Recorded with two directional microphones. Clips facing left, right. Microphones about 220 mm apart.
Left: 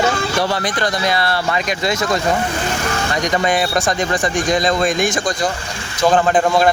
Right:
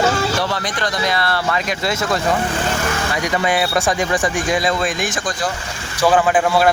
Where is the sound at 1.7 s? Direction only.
5° right (ahead or behind).